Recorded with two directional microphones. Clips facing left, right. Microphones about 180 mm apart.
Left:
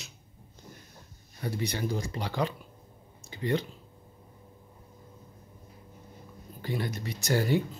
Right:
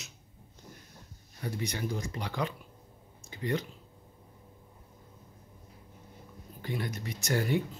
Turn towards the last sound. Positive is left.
turn(degrees=30)  # may be behind; listen again after turning